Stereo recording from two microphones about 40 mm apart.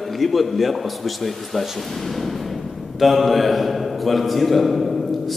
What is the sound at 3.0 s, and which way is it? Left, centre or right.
A man's voice, centre.